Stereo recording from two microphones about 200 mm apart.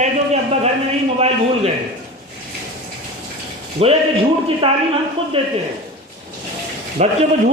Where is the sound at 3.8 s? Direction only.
30° right (ahead or behind).